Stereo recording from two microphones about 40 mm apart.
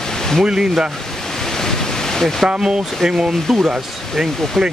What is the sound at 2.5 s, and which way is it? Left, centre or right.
Speech, right.